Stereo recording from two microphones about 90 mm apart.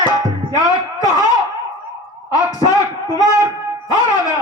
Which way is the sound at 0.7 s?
45° left (ahead or behind).